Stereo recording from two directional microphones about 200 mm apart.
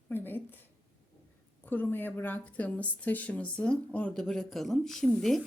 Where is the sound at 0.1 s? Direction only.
10° left (ahead or behind).